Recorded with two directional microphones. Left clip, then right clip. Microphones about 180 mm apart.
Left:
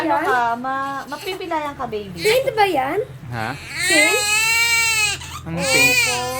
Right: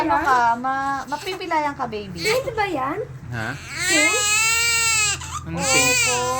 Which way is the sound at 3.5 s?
15° right (ahead or behind).